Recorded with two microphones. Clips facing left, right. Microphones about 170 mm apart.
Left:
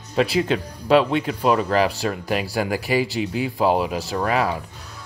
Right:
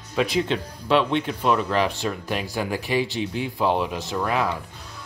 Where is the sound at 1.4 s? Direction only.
40° left (ahead or behind).